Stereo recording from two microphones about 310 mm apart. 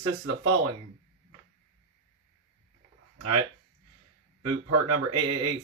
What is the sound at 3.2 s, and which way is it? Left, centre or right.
Speech, right.